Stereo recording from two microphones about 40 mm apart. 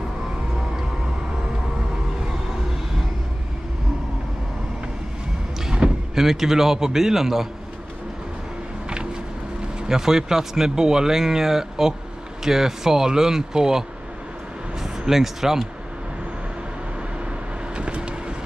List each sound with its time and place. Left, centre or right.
5.8 s vehicle: right
6.1 s speech: centre
9.8 s speech: centre
17.7 s vehicle: right